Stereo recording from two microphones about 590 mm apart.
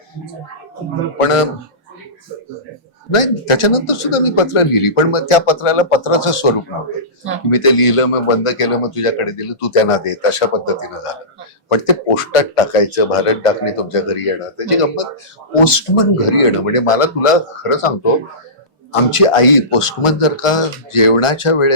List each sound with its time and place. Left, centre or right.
1.2 s a man's voice: left
3.1 s a man's voice: left
7.5 s a man's voice: left